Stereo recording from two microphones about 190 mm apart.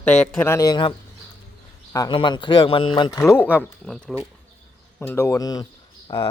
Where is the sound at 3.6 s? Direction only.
Centre (ahead or behind).